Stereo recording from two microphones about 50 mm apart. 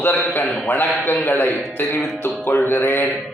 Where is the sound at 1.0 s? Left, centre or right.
Left.